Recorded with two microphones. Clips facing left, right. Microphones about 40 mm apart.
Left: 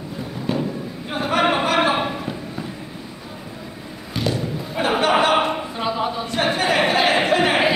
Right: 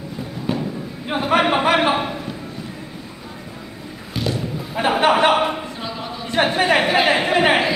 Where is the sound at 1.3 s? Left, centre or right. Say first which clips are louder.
Right 2 dB; right.